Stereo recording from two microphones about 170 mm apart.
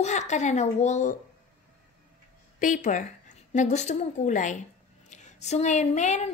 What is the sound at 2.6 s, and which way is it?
A woman's voice, 50° left (ahead or behind).